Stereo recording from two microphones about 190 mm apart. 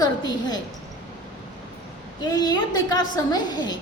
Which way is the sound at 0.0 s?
20° left (ahead or behind).